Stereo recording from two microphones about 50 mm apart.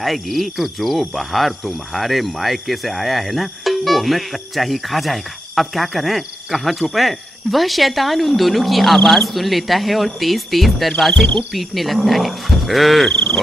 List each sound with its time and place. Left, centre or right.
0.0 s speech: centre